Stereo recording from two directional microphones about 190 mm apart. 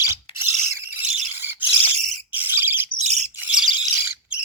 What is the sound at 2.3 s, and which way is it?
Bird, 10° right (ahead or behind).